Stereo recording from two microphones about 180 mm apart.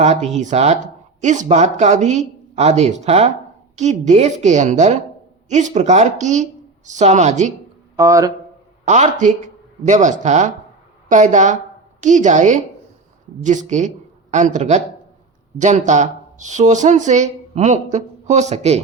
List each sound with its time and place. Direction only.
0.0 s speech: 40° right (ahead or behind)
7.9 s speech: 20° right (ahead or behind)
8.8 s a man's voice: 40° right (ahead or behind)